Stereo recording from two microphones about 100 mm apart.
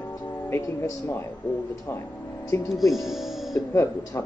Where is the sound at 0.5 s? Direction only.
30° left (ahead or behind).